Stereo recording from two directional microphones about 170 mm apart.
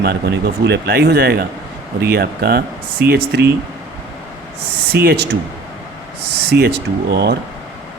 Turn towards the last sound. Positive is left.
turn(degrees=-75)  # may be behind; listen again after turning